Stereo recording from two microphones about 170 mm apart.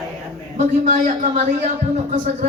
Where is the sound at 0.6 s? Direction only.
50° right (ahead or behind).